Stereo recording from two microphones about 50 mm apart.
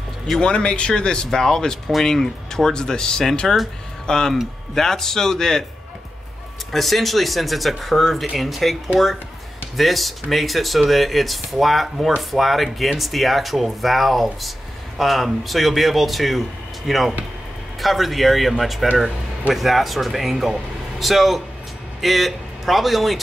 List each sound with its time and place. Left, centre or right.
0.4 s speech: centre
6.7 s a man's voice: centre